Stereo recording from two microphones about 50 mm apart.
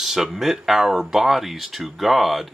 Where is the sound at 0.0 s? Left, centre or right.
Centre.